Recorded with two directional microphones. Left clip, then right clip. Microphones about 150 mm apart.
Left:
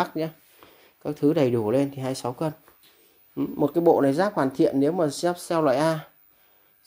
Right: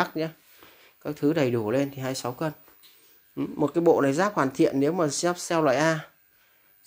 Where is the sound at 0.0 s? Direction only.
20° left (ahead or behind).